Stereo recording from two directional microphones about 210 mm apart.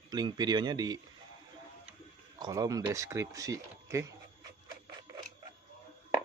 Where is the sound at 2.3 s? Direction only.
15° right (ahead or behind).